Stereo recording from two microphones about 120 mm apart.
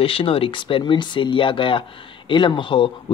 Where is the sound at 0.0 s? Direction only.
50° left (ahead or behind).